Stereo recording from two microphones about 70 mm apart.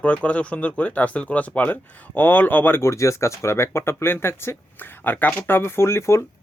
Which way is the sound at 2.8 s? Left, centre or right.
Left.